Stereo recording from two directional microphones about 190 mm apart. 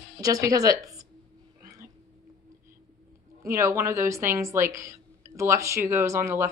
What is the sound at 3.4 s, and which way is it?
Speech, 15° right (ahead or behind).